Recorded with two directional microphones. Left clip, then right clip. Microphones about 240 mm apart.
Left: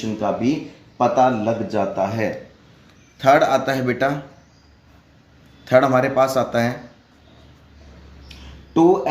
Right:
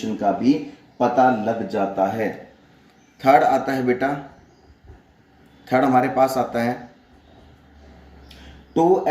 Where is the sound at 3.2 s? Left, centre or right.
Left.